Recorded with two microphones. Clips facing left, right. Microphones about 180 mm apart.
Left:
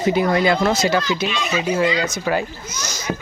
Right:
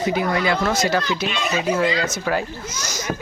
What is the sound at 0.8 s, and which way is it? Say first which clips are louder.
Speech: left 2 dB; centre (ahead or behind).